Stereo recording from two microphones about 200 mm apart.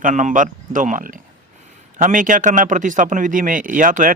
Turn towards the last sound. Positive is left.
turn(degrees=-40)  # may be behind; listen again after turning